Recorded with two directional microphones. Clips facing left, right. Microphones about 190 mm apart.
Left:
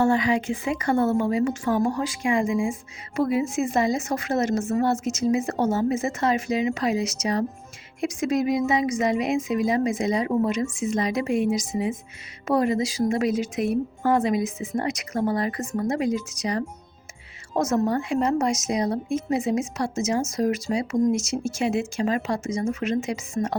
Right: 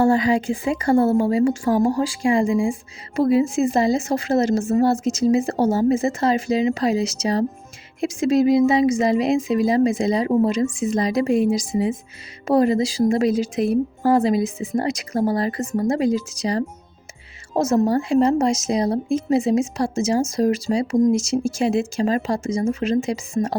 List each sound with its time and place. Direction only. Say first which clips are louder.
0.0 s speech: right 4 dB; 35° right (ahead or behind)